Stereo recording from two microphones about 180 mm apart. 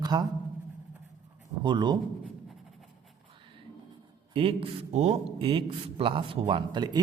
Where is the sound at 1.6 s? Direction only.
25° right (ahead or behind).